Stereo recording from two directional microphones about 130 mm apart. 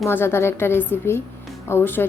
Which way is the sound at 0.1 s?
15° left (ahead or behind).